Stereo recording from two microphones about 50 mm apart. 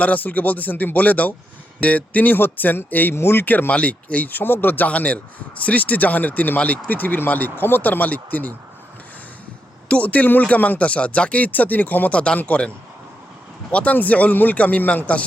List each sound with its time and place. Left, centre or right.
0.0 s a man's voice: left
3.2 s speech: left
3.4 s a man's voice: left
4.9 s a man's voice: left
9.9 s speech: left
12.1 s speech: left
13.7 s speech: left